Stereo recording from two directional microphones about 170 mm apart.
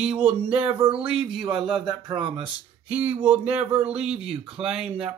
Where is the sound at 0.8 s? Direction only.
30° right (ahead or behind).